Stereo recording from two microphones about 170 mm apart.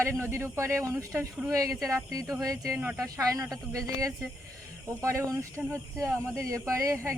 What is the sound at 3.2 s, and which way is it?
Speech, 20° right (ahead or behind).